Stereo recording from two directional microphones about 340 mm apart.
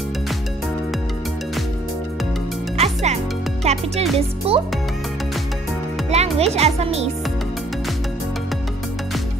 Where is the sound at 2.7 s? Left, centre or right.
Centre.